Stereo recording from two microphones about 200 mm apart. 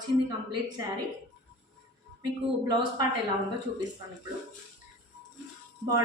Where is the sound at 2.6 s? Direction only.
20° right (ahead or behind).